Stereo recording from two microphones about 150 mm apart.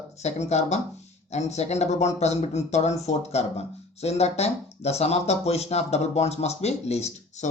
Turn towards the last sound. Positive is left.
turn(degrees=45)  # may be behind; listen again after turning